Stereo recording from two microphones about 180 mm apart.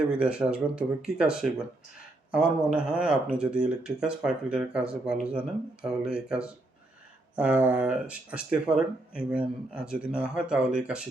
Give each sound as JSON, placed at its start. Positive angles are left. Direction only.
{"t": 0.1, "sound": "speech", "side_deg": -5}
{"t": 2.7, "sound": "speech", "side_deg": -5}